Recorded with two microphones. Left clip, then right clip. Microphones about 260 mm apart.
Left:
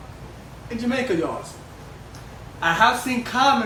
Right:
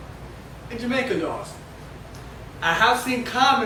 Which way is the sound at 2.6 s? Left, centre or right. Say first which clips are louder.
Left 1 dB; centre.